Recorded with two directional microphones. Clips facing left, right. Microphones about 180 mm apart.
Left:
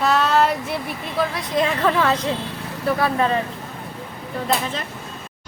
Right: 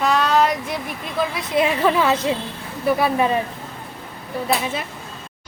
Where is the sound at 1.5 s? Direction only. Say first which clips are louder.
Right 2 dB; 10° right (ahead or behind).